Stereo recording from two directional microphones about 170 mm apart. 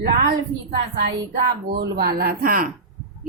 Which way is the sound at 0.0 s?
70° right (ahead or behind).